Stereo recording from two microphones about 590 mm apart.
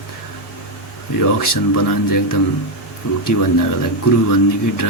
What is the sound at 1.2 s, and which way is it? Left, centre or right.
Speech, left.